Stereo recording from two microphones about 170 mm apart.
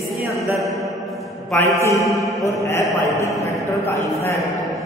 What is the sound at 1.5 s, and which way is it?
Speech, 15° left (ahead or behind).